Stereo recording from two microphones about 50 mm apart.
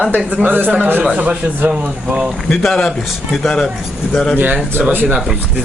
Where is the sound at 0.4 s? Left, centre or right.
Right.